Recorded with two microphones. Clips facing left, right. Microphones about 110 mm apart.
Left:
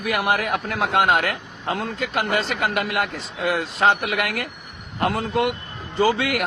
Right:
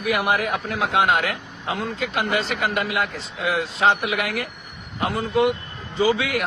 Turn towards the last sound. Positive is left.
turn(degrees=55)  # may be behind; listen again after turning